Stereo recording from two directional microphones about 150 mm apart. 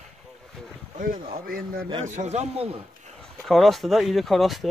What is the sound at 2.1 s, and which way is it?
Speech, 50° right (ahead or behind).